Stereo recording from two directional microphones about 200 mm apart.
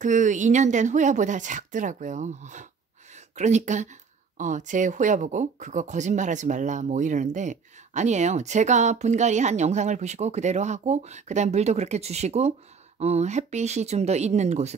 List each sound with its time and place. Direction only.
0.0 s speech: 40° right (ahead or behind)